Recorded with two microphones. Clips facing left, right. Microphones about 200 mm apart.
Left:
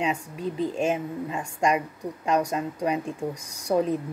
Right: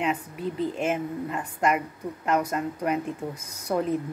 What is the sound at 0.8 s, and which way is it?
Speech, 15° left (ahead or behind).